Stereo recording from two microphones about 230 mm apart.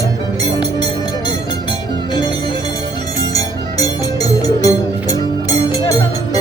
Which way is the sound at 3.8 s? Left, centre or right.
Centre.